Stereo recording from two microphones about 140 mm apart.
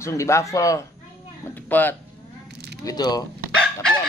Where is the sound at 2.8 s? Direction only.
30° left (ahead or behind).